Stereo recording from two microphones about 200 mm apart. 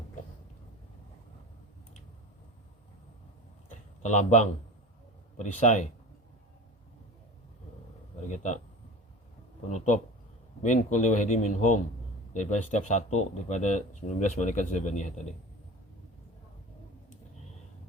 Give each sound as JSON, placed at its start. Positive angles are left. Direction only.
{"t": 4.0, "sound": "speech", "side_deg": 35}
{"t": 9.7, "sound": "speech", "side_deg": 35}